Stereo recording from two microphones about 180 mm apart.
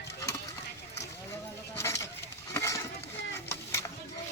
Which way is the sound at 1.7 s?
15° left (ahead or behind).